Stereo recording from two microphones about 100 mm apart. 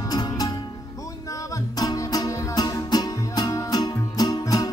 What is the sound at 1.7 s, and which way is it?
Music, 40° left (ahead or behind).